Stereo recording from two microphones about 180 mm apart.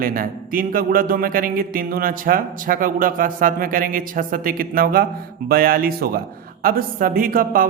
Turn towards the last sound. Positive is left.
turn(degrees=-50)  # may be behind; listen again after turning